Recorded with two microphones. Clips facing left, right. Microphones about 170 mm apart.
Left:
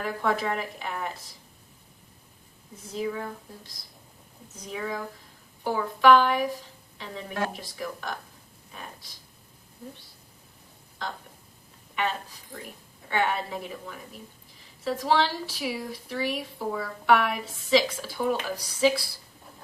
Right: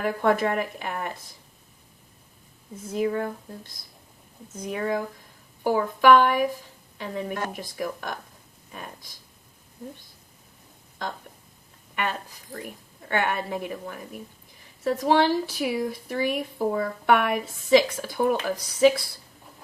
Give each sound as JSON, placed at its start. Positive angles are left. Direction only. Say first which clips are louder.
{"t": 0.0, "sound": "speech", "louder": "right 5 dB", "side_deg": -50}
{"t": 2.9, "sound": "speech", "louder": "right 5 dB", "side_deg": -50}
{"t": 4.5, "sound": "speech", "louder": "right 6 dB", "side_deg": -55}
{"t": 13.1, "sound": "a woman's voice", "louder": "right 1 dB", "side_deg": -55}